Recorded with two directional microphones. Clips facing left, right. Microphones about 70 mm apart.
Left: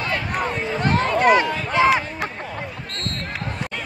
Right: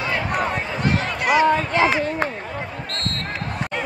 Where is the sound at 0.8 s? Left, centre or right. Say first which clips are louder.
Left 5 dB; left.